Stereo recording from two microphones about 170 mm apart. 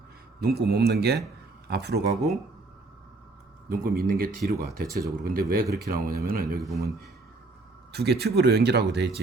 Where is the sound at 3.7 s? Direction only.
60° right (ahead or behind).